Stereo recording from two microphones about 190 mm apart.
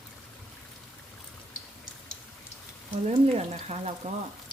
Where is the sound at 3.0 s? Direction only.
35° right (ahead or behind).